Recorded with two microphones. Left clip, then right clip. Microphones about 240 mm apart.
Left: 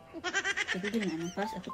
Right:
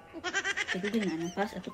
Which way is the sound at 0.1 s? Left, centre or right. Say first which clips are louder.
Even; centre.